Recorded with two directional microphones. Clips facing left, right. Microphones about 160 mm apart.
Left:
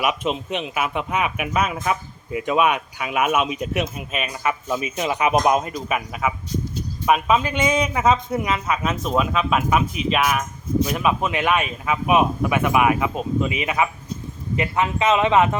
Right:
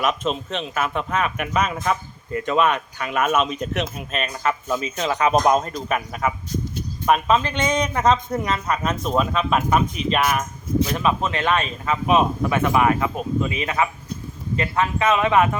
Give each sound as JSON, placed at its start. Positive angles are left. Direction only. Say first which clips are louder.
{"t": 0.0, "sound": "a man's voice", "louder": "even", "side_deg": 10}